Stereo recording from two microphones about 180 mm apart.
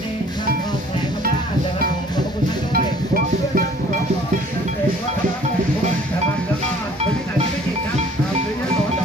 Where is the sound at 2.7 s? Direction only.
55° right (ahead or behind).